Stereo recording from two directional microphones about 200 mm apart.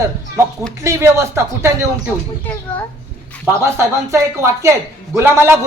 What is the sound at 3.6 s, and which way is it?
Speech, 15° right (ahead or behind).